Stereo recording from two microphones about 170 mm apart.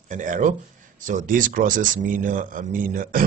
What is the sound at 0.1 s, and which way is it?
Speech, 50° right (ahead or behind).